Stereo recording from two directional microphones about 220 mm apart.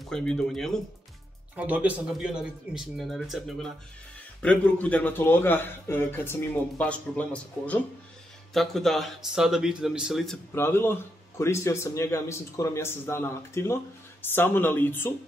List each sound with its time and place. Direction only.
0.0 s speech: 5° left (ahead or behind)